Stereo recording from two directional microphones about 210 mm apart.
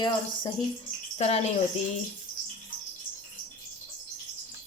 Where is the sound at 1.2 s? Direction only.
30° left (ahead or behind).